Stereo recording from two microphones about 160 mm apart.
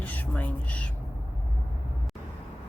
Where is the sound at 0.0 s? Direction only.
10° left (ahead or behind).